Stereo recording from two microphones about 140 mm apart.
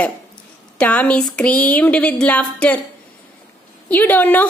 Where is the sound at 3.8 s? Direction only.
10° left (ahead or behind).